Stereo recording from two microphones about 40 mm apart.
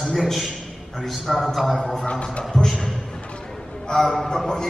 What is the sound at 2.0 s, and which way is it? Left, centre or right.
Music, left.